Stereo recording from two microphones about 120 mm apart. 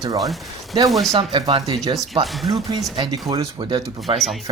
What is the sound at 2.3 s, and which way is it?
Speech, centre (ahead or behind).